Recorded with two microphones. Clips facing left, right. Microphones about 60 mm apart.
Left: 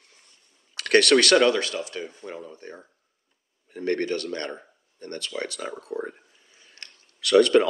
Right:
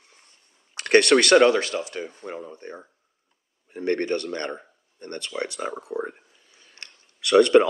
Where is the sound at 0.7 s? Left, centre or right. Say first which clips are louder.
Right 2 dB; right.